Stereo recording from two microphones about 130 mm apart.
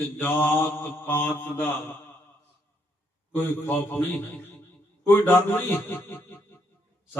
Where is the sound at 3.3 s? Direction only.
15° left (ahead or behind).